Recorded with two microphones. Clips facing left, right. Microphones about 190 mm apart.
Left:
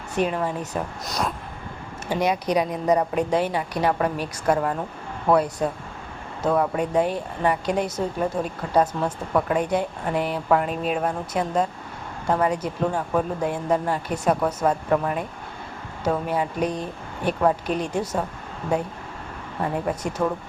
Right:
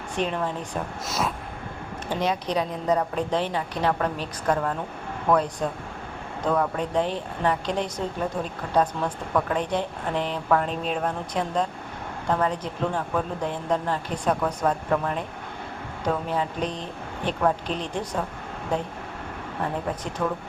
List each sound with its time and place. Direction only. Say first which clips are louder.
0.2 s speech: left 3 dB; 5° left (ahead or behind)
20.2 s speech: left 3 dB; 20° left (ahead or behind)